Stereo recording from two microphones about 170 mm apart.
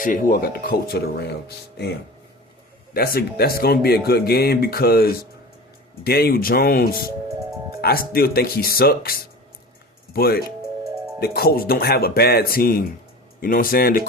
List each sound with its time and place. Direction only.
0.0 s speech: 55° left (ahead or behind); by 1.9 s 75° left (ahead or behind)
2.9 s speech: 65° left (ahead or behind)